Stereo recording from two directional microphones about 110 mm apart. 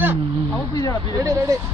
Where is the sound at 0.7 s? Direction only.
35° left (ahead or behind).